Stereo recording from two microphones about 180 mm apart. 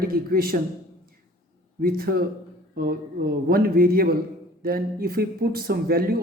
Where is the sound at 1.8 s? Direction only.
55° right (ahead or behind).